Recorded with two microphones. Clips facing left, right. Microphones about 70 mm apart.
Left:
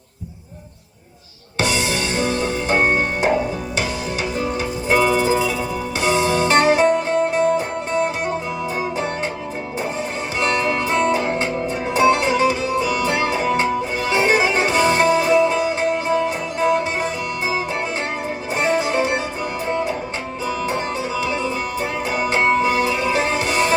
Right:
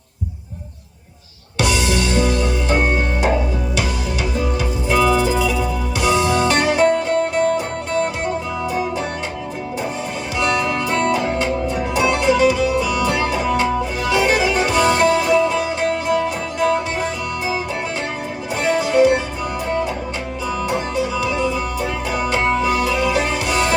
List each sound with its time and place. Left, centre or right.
1.5 s music: left
4.9 s music: left
10.4 s music: left
18.6 s music: left
20.7 s music: left